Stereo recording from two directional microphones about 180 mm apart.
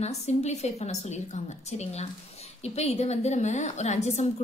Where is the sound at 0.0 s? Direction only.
40° left (ahead or behind).